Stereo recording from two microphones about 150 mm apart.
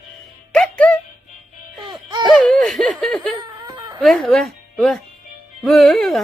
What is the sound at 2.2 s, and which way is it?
Laughter, centre (ahead or behind).